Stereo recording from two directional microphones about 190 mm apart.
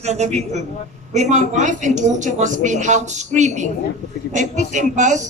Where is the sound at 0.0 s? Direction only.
35° right (ahead or behind).